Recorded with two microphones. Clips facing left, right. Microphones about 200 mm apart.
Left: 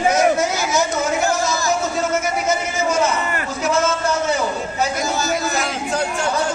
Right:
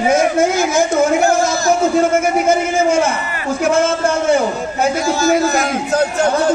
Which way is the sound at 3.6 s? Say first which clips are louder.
Right 5 dB; 55° right (ahead or behind).